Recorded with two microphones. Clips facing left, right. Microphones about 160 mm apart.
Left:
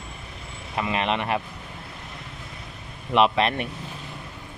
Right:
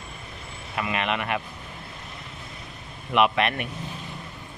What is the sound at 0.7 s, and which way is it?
Speech, 30° left (ahead or behind).